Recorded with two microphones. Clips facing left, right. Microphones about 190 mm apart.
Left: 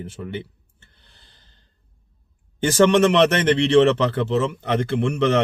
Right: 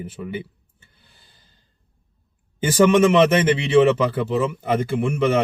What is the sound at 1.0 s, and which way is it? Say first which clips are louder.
Gasp: right 1 dB; 5° right (ahead or behind).